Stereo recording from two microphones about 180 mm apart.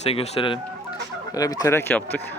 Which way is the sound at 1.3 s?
20° left (ahead or behind).